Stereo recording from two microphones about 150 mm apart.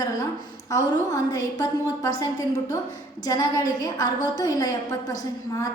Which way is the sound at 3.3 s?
25° left (ahead or behind).